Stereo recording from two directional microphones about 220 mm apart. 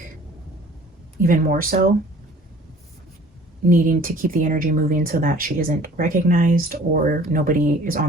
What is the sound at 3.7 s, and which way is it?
Speech, 40° right (ahead or behind).